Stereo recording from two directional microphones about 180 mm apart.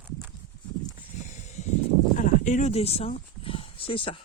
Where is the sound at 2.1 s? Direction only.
45° left (ahead or behind); by 4.2 s 30° left (ahead or behind).